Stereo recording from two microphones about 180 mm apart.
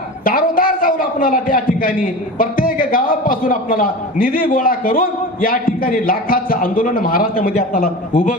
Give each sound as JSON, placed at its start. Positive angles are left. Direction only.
{"t": 0.3, "sound": "a man's voice", "side_deg": 50}